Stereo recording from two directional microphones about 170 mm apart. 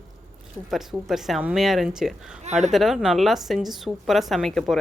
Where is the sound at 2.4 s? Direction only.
40° right (ahead or behind).